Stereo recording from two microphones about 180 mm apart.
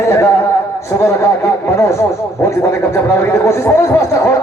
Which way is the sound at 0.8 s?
15° left (ahead or behind).